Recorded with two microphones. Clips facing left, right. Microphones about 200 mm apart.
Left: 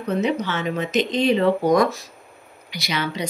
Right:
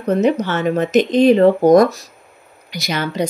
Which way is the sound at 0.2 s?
45° right (ahead or behind).